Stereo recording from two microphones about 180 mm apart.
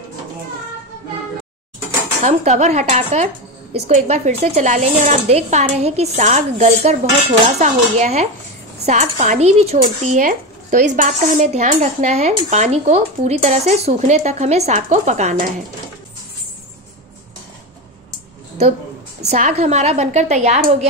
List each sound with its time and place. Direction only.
2.2 s speech: 40° right (ahead or behind)
19.2 s speech: 40° right (ahead or behind)